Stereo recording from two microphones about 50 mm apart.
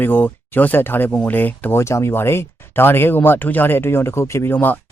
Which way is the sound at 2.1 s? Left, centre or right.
Left.